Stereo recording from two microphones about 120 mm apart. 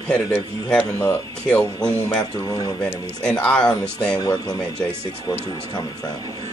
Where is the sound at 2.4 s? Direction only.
30° left (ahead or behind).